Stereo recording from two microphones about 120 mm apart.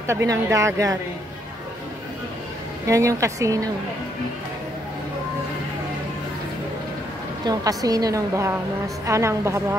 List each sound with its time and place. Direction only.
0.0 s a woman's voice: 25° right (ahead or behind)
2.9 s a woman's voice: 25° right (ahead or behind)
7.4 s a woman's voice: 30° right (ahead or behind)